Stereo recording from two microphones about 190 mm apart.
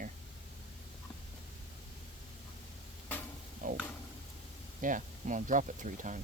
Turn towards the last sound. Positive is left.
turn(degrees=-40)  # may be behind; listen again after turning